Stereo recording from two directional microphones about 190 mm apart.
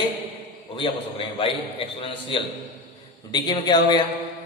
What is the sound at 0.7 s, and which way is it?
A man's voice, 30° left (ahead or behind).